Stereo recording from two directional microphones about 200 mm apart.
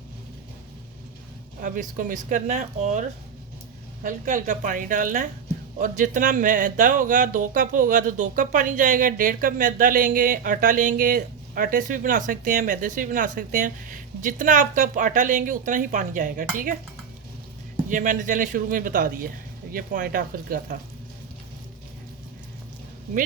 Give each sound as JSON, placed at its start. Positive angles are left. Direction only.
{"t": 1.6, "sound": "speech", "side_deg": -40}
{"t": 17.8, "sound": "speech", "side_deg": -40}